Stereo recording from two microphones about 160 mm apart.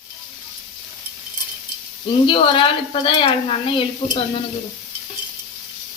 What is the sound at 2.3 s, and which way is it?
Speech, 30° left (ahead or behind).